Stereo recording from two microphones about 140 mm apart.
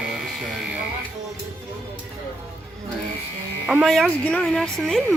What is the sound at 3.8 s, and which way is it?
Speech, centre (ahead or behind).